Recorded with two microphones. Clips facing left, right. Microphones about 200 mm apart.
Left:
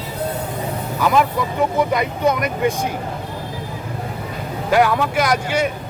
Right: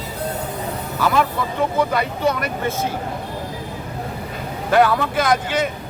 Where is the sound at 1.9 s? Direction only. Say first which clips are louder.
Left 2 dB; 15° left (ahead or behind).